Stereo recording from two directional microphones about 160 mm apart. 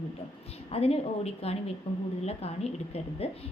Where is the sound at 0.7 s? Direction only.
40° left (ahead or behind).